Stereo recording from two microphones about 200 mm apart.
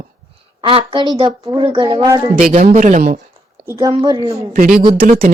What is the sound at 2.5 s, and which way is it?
Speech, 35° right (ahead or behind).